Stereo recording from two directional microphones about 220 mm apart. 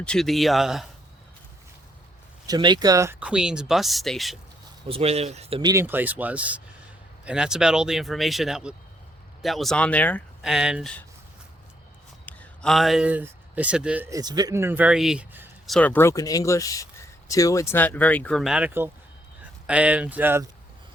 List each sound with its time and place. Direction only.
0.0 s speech: centre (ahead or behind)
2.5 s speech: 20° right (ahead or behind); by 4.4 s centre (ahead or behind)
4.9 s speech: 25° right (ahead or behind); by 11.0 s centre (ahead or behind)
12.2 s speech: 5° left (ahead or behind)
15.7 s speech: 5° left (ahead or behind); by 20.5 s 10° right (ahead or behind)